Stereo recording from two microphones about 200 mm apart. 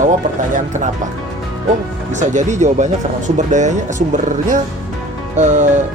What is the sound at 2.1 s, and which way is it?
Speech, 35° right (ahead or behind).